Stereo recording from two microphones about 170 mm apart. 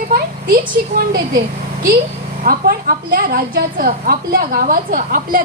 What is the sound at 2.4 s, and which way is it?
A woman's voice, 60° right (ahead or behind).